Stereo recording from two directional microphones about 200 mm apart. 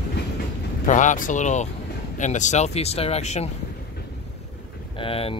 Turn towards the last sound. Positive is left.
turn(degrees=30)  # may be behind; listen again after turning